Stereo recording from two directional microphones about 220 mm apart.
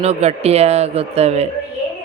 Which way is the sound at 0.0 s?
30° right (ahead or behind).